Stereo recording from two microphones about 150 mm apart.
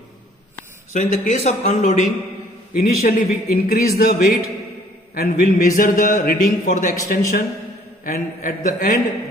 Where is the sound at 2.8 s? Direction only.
65° left (ahead or behind).